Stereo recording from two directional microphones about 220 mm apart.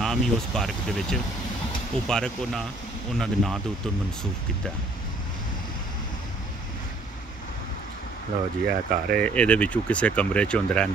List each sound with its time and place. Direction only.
0.0 s speech: centre (ahead or behind)
8.6 s speech: 45° right (ahead or behind)
9.2 s speech: 5° left (ahead or behind)